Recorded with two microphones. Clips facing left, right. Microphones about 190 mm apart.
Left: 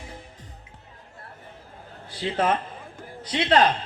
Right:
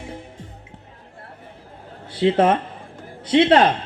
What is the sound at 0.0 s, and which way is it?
Music, 25° right (ahead or behind).